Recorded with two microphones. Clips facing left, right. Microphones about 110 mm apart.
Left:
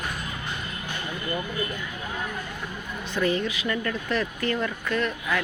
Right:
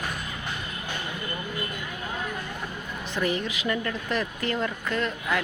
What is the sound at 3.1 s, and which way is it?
Speech, 20° right (ahead or behind).